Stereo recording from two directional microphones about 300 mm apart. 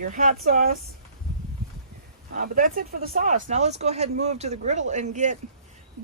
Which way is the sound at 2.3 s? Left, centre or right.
Right.